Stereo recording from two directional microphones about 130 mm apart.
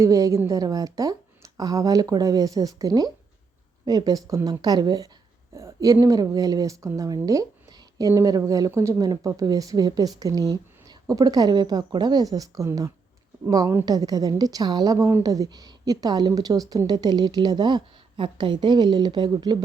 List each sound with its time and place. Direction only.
0.0 s a woman's voice: 25° right (ahead or behind)